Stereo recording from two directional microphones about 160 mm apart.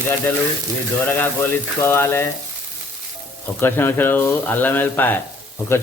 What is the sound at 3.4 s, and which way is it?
Speech, 15° left (ahead or behind).